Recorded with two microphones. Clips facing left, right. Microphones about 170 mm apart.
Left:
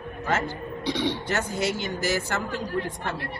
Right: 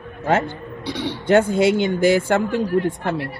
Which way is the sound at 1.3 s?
55° right (ahead or behind).